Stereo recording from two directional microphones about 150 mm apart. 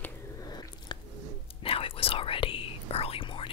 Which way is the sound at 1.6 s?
40° left (ahead or behind).